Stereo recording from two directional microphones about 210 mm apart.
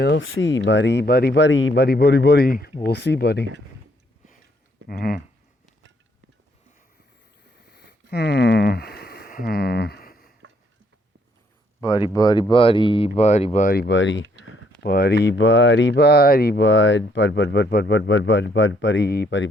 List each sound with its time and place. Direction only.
0.0 s speech: 60° left (ahead or behind)
4.9 s speech: 45° left (ahead or behind)
8.1 s speech: 50° left (ahead or behind)
11.8 s speech: 20° left (ahead or behind); by 14.3 s 60° left (ahead or behind)
14.8 s speech: 50° left (ahead or behind)